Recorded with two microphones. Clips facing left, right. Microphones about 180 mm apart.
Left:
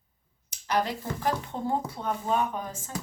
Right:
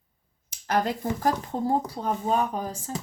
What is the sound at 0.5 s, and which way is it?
Speech, 45° right (ahead or behind).